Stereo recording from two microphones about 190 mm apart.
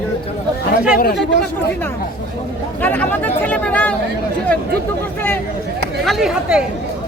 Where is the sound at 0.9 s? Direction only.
55° left (ahead or behind).